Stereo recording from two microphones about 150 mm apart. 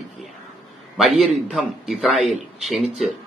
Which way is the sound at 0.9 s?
Centre (ahead or behind).